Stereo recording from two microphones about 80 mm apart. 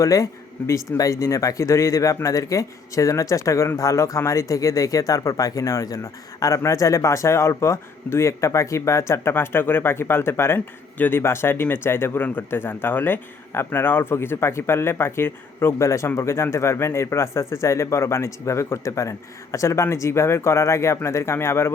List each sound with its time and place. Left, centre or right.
0.0 s speech: left